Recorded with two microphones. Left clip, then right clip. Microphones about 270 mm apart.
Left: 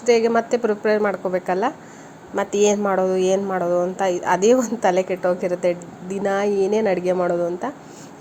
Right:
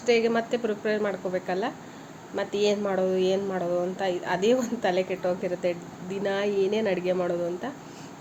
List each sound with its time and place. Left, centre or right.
0.0 s a woman's voice: centre